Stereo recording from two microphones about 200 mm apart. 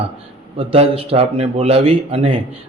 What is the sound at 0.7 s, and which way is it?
A man's voice, 30° right (ahead or behind).